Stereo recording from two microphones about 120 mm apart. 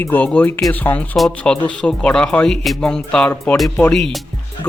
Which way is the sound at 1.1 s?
5° left (ahead or behind).